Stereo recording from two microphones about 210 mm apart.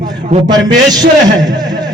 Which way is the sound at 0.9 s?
20° right (ahead or behind).